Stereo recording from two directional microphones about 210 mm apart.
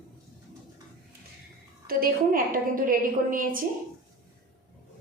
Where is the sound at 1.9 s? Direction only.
45° right (ahead or behind).